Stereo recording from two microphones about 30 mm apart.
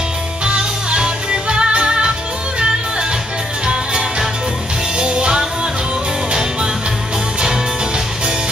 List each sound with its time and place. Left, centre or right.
0.5 s music: right
4.9 s music: right